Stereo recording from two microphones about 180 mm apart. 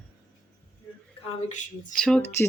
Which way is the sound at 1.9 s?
5° left (ahead or behind).